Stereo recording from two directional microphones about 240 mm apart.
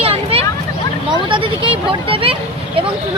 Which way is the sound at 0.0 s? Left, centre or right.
Right.